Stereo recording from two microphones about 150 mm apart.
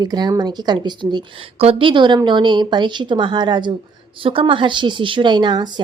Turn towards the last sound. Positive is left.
turn(degrees=-30)  # may be behind; listen again after turning